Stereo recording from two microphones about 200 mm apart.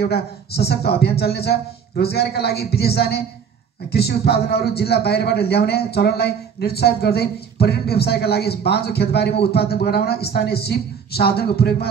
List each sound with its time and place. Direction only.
0.0 s a man's voice: 55° left (ahead or behind)